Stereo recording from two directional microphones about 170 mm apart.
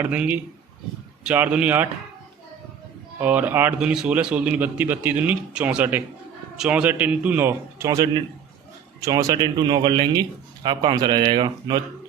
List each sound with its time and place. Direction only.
0.0 s a man's voice: 10° right (ahead or behind)
3.2 s a man's voice: 10° right (ahead or behind); by 11.8 s 25° right (ahead or behind)